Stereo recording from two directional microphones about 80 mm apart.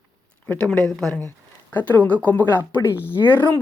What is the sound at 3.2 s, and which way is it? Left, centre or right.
Speech, left.